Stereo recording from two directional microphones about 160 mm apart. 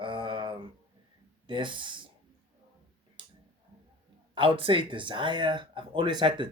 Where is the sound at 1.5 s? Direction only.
30° right (ahead or behind).